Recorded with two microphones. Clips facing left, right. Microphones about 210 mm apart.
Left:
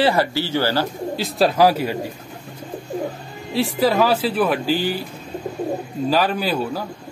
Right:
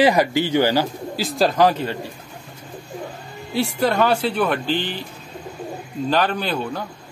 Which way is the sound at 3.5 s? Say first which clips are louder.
Left 2 dB; centre (ahead or behind).